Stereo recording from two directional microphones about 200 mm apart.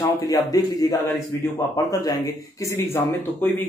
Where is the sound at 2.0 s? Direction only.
15° left (ahead or behind).